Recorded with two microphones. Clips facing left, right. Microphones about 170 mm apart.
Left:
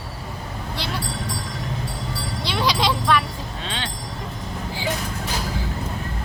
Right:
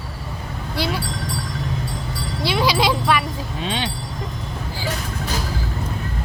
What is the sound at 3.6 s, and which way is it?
Vehicle, 15° right (ahead or behind).